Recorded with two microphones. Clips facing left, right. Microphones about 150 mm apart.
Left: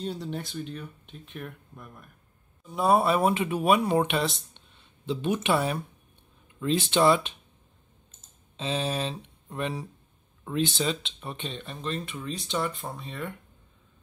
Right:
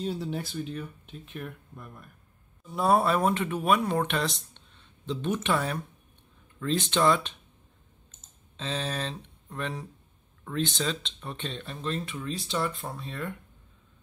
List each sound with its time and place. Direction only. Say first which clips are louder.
0.0 s speech: right 1 dB; centre (ahead or behind)
8.5 s speech: left 3 dB; 10° left (ahead or behind)